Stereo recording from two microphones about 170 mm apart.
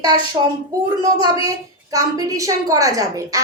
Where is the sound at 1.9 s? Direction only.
20° right (ahead or behind).